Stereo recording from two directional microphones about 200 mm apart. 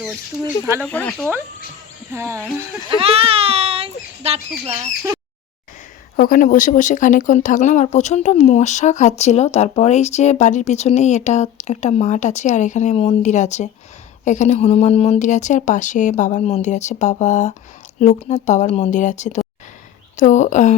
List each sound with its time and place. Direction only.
0.8 s speech: 10° left (ahead or behind)
2.1 s speech: 15° right (ahead or behind)
2.9 s speech: 30° right (ahead or behind)
6.1 s speech: 45° left (ahead or behind)